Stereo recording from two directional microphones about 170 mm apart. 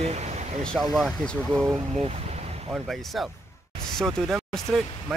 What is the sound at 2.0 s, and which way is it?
Vehicle, 35° right (ahead or behind).